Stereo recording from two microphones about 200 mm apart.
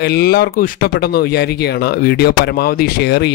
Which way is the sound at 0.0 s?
55° left (ahead or behind).